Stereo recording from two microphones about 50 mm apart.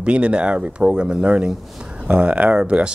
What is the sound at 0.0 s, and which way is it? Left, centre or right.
Speech, right.